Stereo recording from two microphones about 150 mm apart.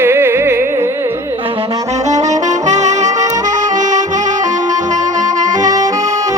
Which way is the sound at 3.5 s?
55° right (ahead or behind).